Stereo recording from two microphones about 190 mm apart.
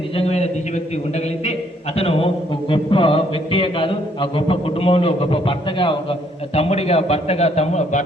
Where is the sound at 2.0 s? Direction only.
30° left (ahead or behind).